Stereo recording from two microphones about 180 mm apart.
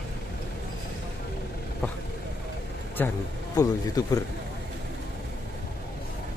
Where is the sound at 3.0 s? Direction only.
10° left (ahead or behind).